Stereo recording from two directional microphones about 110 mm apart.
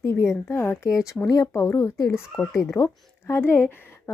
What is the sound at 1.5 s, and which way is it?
A woman's voice, 25° left (ahead or behind).